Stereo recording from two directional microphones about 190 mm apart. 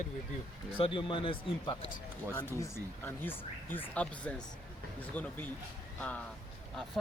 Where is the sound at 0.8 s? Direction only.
25° left (ahead or behind).